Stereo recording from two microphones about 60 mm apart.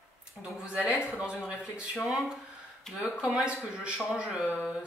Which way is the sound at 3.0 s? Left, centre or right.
Centre.